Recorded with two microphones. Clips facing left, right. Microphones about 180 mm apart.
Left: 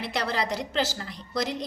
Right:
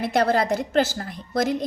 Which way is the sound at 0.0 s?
50° right (ahead or behind).